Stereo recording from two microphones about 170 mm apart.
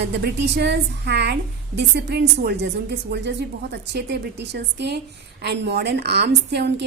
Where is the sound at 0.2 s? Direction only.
80° right.